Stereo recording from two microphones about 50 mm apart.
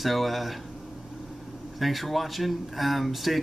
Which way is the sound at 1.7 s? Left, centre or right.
Centre.